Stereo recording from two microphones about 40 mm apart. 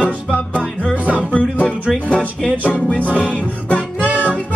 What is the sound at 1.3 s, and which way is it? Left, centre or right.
Music, left.